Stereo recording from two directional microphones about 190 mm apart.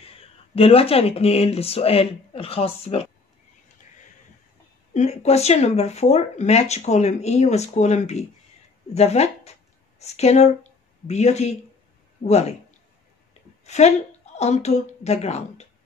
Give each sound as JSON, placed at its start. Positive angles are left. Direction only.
{"t": 0.0, "sound": "speech", "side_deg": 30}
{"t": 4.9, "sound": "speech", "side_deg": 35}
{"t": 8.9, "sound": "a sound", "side_deg": 35}
{"t": 11.1, "sound": "speech", "side_deg": 35}
{"t": 13.7, "sound": "a woman's voice", "side_deg": 35}